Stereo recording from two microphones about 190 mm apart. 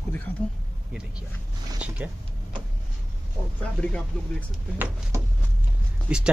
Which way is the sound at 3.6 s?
5° left (ahead or behind).